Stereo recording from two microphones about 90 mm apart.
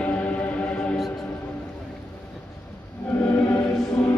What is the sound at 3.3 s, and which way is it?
Music, 20° left (ahead or behind).